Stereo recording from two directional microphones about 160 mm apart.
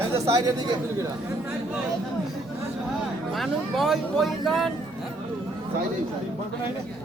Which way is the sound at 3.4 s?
Centre (ahead or behind).